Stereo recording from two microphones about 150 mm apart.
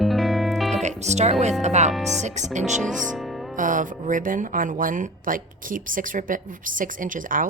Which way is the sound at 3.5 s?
60° right (ahead or behind).